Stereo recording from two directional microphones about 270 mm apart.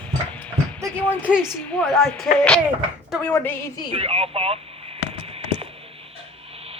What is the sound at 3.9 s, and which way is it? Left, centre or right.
Speech, right.